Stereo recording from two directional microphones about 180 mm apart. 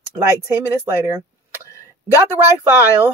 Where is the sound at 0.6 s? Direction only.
10° right (ahead or behind).